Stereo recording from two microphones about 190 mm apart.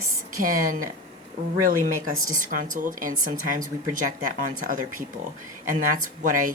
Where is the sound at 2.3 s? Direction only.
45° right (ahead or behind).